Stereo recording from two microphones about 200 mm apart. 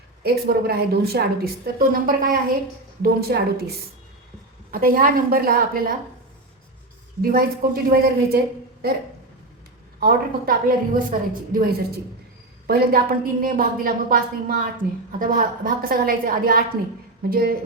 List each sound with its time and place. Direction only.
0.2 s a woman's voice: 50° right (ahead or behind)
4.7 s a woman's voice: 45° right (ahead or behind)
7.2 s a woman's voice: 45° right (ahead or behind)
10.0 s a woman's voice: 45° right (ahead or behind)